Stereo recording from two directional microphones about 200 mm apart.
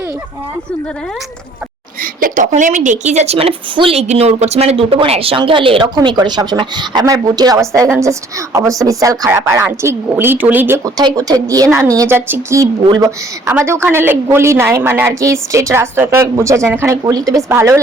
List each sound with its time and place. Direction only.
2.0 s a woman's voice: 40° right (ahead or behind); by 17.7 s 15° right (ahead or behind)